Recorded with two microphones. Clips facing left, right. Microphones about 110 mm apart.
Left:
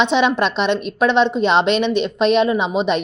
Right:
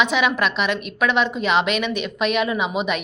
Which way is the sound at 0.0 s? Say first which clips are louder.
Left 4 dB; 30° left (ahead or behind).